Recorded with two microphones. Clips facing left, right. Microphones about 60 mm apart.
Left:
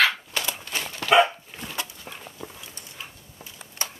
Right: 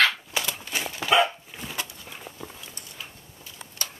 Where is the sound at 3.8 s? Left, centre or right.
Left.